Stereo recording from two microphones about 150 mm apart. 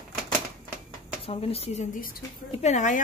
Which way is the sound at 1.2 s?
40° left (ahead or behind).